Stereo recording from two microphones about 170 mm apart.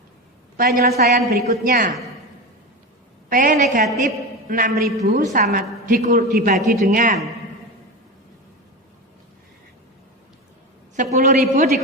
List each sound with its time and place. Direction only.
0.8 s a woman's voice: 65° right (ahead or behind)
3.2 s a woman's voice: 50° right (ahead or behind)
6.3 s a woman's voice: 65° right (ahead or behind)
10.9 s a woman's voice: 45° right (ahead or behind)